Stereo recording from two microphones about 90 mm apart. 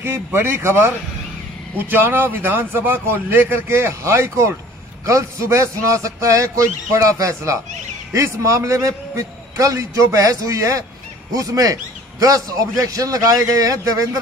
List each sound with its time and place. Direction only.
0.0 s a man's voice: 25° right (ahead or behind)